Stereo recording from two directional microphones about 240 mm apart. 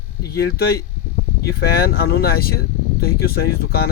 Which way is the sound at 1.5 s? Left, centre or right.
Left.